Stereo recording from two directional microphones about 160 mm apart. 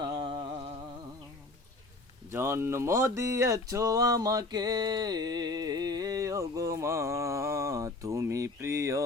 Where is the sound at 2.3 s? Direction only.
15° right (ahead or behind).